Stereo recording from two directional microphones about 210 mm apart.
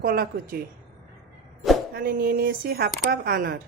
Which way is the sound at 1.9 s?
45° right (ahead or behind).